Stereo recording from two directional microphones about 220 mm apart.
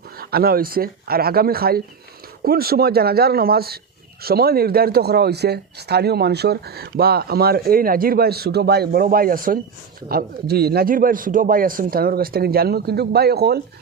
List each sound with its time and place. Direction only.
0.2 s speech: 45° right (ahead or behind)